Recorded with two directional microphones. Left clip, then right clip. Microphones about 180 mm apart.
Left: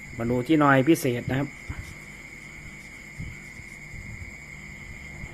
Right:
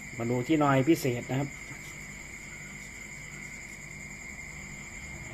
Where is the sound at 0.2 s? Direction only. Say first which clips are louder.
Left 5 dB; 30° left (ahead or behind).